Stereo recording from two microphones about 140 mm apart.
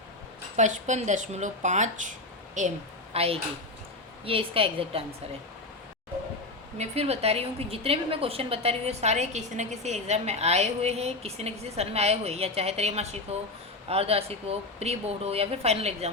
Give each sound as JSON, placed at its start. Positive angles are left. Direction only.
{"t": 0.5, "sound": "a woman's voice", "side_deg": -60}
{"t": 6.7, "sound": "a woman's voice", "side_deg": -50}